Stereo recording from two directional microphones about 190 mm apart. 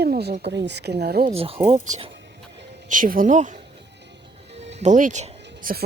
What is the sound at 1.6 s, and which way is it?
Speech, 30° right (ahead or behind).